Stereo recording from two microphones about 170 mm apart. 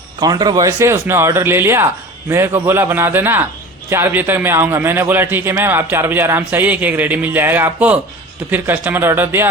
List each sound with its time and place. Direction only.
0.2 s a man's voice: 25° right (ahead or behind)